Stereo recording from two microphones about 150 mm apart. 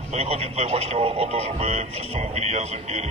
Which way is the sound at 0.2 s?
45° right (ahead or behind).